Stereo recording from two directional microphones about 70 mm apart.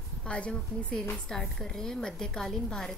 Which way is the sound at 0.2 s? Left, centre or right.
Centre.